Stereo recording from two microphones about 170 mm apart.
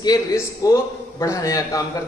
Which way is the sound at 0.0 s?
20° left (ahead or behind).